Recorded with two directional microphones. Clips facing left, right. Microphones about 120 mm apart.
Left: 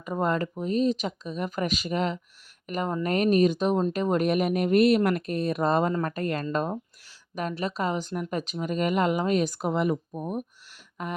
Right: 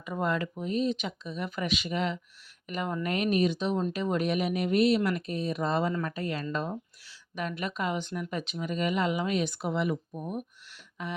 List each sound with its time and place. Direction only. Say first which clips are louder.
0.0 s speech: left 4 dB; 40° left (ahead or behind)